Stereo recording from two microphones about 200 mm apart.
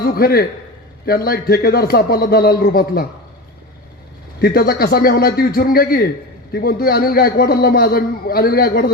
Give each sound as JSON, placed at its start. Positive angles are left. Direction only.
{"t": 0.0, "sound": "a man's voice", "side_deg": 50}
{"t": 4.4, "sound": "a man's voice", "side_deg": 50}